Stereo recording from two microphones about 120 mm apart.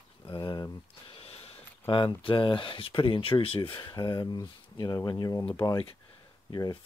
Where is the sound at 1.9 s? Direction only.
45° left (ahead or behind).